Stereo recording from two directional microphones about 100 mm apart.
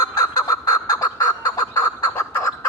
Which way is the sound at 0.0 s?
40° left (ahead or behind).